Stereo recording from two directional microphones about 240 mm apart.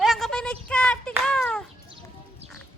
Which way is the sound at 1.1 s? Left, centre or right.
Centre.